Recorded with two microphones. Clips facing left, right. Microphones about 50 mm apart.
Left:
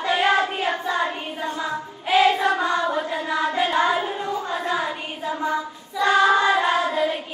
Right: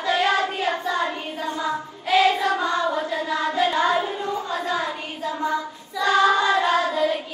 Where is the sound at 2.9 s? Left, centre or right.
Centre.